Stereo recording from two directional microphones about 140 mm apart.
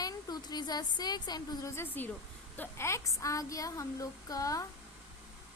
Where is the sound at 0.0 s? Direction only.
30° left (ahead or behind).